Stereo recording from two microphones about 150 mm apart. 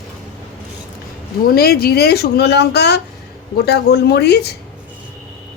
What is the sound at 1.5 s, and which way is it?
Speech, 90° left.